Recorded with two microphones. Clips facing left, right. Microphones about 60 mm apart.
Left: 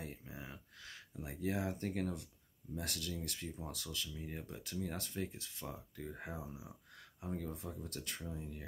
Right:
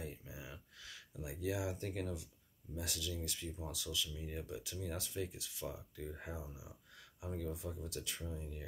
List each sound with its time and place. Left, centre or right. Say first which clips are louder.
0.3 s a sound: left 1 dB; left
2.7 s speech: left 1 dB; left
6.3 s speech: left 2 dB; centre
7.0 s speech: left 1 dB; left